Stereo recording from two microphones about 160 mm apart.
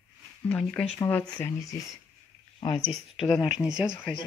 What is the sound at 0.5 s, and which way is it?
Speech, 5° left (ahead or behind).